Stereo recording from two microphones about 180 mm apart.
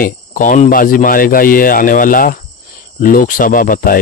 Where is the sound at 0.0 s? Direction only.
50° left (ahead or behind).